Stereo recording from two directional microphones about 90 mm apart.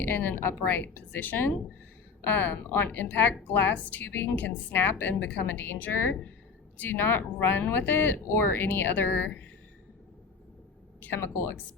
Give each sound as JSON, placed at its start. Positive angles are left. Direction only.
{"t": 0.0, "sound": "a woman's voice", "side_deg": 20}
{"t": 11.0, "sound": "a woman's voice", "side_deg": 25}